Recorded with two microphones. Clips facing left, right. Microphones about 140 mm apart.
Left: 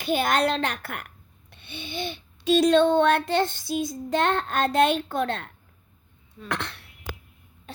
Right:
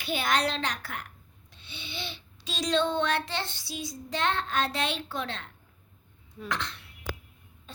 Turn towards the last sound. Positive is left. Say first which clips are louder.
# left 6 dB
turn(degrees=65)  # may be behind; listen again after turning